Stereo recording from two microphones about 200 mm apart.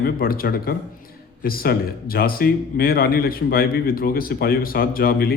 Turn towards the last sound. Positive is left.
turn(degrees=50)  # may be behind; listen again after turning